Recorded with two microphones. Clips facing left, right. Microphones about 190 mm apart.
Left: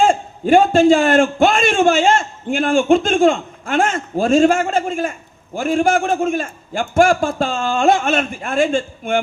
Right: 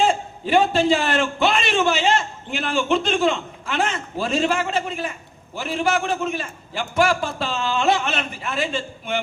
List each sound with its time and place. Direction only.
0.0 s a man's voice: 45° left (ahead or behind)